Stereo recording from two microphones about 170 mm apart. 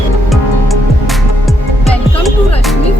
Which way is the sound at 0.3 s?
Centre (ahead or behind).